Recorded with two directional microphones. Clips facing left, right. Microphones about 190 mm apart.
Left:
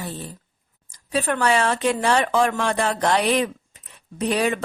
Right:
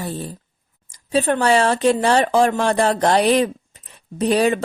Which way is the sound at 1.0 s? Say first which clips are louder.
Right 4 dB; 30° right (ahead or behind).